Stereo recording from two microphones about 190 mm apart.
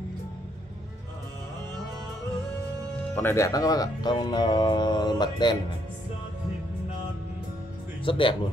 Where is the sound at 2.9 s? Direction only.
10° left (ahead or behind).